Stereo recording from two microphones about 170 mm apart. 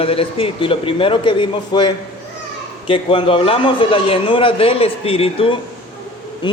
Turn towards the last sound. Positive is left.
turn(degrees=35)  # may be behind; listen again after turning